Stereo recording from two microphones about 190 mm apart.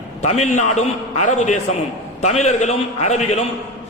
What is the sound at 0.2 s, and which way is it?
A man's voice, 35° left (ahead or behind).